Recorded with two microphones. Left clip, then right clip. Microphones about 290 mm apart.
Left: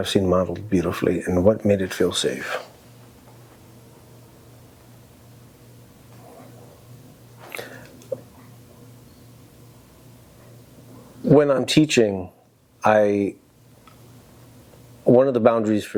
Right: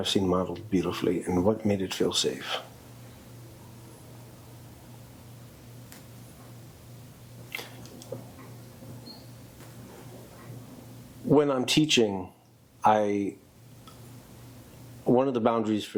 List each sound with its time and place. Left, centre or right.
0.0 s speech: left
11.3 s speech: left
15.1 s speech: left